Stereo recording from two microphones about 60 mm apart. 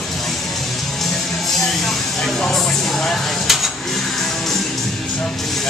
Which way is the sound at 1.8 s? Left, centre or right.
Centre.